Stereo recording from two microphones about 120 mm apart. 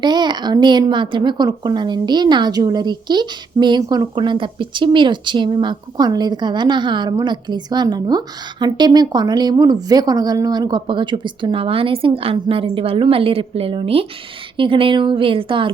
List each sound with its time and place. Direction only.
0.0 s a woman's voice: 40° right (ahead or behind)